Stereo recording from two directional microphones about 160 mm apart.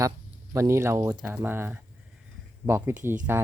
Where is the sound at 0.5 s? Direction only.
20° right (ahead or behind).